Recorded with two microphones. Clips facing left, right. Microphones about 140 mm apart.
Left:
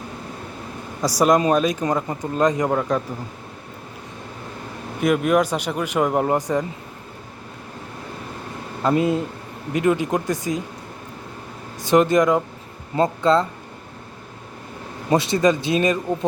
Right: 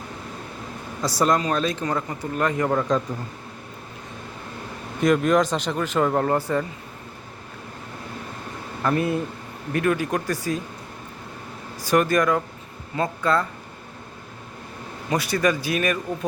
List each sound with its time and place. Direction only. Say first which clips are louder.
1.2 s speech: left 5 dB; 20° left (ahead or behind)
4.9 s speech: left 1 dB; 10° left (ahead or behind)
8.8 s speech: left 3 dB; 20° left (ahead or behind)
11.8 s speech: left 4 dB; 20° left (ahead or behind)
15.1 s speech: left 4 dB; 25° left (ahead or behind)